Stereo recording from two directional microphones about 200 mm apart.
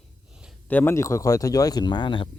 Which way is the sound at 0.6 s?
10° left (ahead or behind).